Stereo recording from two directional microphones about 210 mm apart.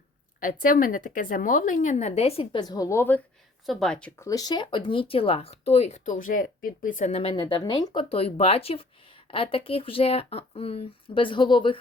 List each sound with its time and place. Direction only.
0.3 s speech: 40° left (ahead or behind); by 4.3 s 5° left (ahead or behind)
4.3 s speech: 20° left (ahead or behind)